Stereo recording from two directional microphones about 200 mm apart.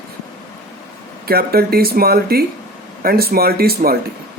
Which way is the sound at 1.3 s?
50° right (ahead or behind).